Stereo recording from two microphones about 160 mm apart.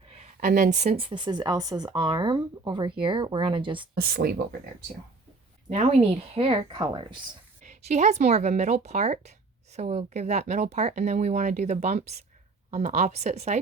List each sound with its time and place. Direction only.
0.1 s speech: 50° right (ahead or behind); by 3.8 s 30° right (ahead or behind)
3.9 s speech: 75° right (ahead or behind)
5.6 s speech: 40° right (ahead or behind)
7.6 s speech: 45° right (ahead or behind)